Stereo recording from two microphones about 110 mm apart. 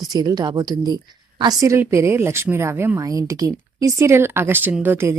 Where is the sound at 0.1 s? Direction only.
35° right (ahead or behind).